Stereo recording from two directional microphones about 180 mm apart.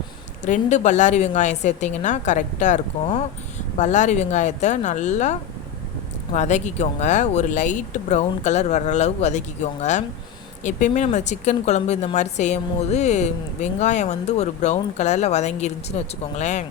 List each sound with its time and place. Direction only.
0.4 s speech: 45° left (ahead or behind)
10.6 s speech: 40° left (ahead or behind)